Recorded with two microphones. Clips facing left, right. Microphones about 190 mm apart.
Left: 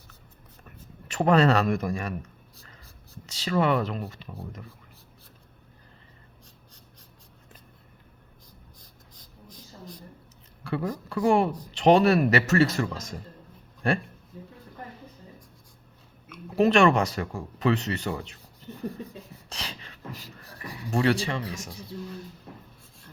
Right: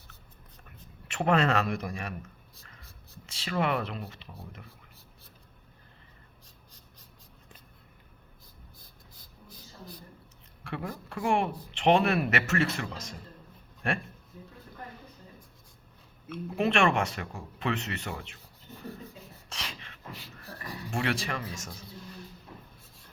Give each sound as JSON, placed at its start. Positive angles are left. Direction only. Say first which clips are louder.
{"t": 1.0, "sound": "speech", "louder": "left 5 dB", "side_deg": 40}
{"t": 3.2, "sound": "speech", "louder": "left 5 dB", "side_deg": 40}
{"t": 10.6, "sound": "a sound", "louder": "left 7 dB", "side_deg": 35}
{"t": 11.1, "sound": "speech", "louder": "left 6 dB", "side_deg": 35}
{"t": 16.6, "sound": "speech", "louder": "left 6 dB", "side_deg": 40}
{"t": 19.5, "sound": "a sound", "louder": "left 1 dB", "side_deg": 35}
{"t": 20.9, "sound": "speech", "louder": "left 7 dB", "side_deg": 35}
{"t": 21.5, "sound": "speech", "louder": "left 4 dB", "side_deg": 15}